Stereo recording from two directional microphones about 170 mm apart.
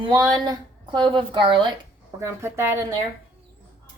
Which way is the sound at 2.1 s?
15° right (ahead or behind).